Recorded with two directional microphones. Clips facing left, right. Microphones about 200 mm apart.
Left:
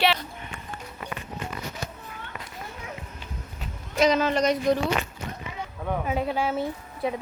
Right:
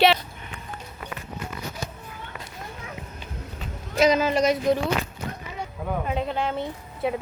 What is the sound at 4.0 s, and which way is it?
Speech, 10° right (ahead or behind).